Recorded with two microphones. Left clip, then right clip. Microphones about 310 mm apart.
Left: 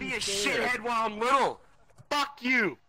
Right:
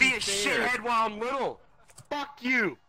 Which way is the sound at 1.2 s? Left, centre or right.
Left.